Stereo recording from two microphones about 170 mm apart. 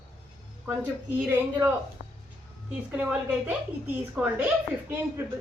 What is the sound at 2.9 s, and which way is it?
A woman's voice, 5° right (ahead or behind).